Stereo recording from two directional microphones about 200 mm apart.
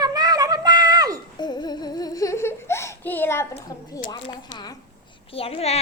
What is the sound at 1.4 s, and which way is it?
Humming, 20° left (ahead or behind).